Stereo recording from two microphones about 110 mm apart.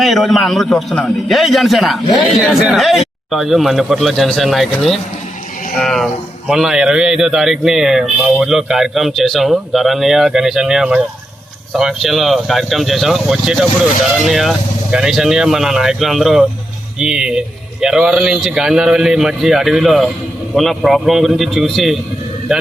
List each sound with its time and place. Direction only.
0.0 s speech: centre (ahead or behind)